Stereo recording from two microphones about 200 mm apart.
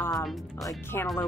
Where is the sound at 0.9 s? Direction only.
10° left (ahead or behind).